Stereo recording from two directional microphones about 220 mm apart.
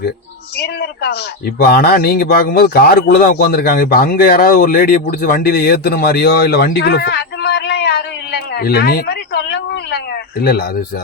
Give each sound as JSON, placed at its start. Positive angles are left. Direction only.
{"t": 0.5, "sound": "a man's voice", "side_deg": 50}